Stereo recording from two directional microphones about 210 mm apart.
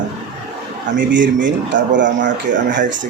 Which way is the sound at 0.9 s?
60° right (ahead or behind).